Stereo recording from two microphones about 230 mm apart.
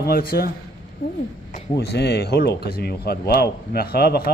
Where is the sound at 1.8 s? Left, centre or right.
Left.